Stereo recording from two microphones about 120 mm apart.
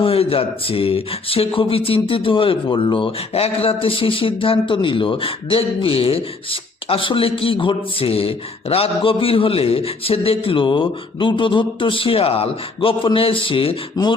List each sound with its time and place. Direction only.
0.0 s a man's voice: 50° left (ahead or behind)